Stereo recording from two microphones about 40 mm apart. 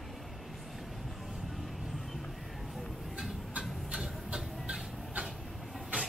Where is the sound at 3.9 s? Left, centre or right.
Centre.